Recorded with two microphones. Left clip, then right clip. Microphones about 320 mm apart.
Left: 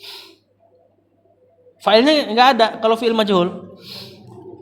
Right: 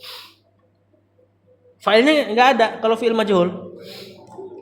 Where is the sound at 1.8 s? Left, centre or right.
Left.